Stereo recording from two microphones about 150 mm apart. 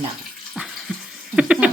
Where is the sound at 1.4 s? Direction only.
5° right (ahead or behind).